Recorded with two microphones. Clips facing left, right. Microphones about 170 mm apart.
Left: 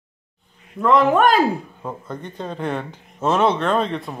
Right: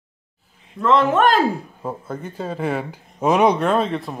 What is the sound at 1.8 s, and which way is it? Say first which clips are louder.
Speech: right 2 dB; 5° right (ahead or behind).